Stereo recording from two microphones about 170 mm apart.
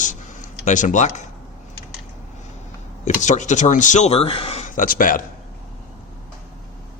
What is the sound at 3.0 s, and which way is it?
Speech, 45° left (ahead or behind).